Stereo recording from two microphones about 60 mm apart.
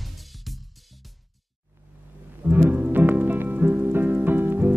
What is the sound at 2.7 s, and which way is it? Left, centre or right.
Music, right.